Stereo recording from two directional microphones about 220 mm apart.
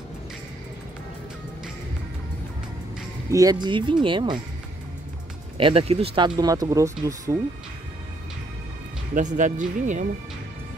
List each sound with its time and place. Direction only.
3.3 s speech: 15° right (ahead or behind)
5.6 s speech: 25° right (ahead or behind)
9.1 s speech: 35° right (ahead or behind)